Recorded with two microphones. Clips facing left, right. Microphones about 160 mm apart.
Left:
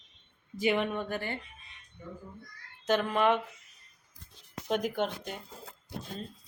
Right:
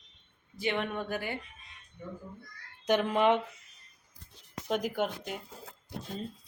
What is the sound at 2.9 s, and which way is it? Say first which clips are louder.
Speech: right 1 dB; 20° right (ahead or behind).